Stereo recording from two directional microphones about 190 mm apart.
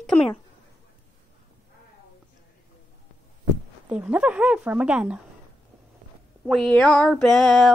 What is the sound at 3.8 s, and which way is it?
Speech, 5° right (ahead or behind).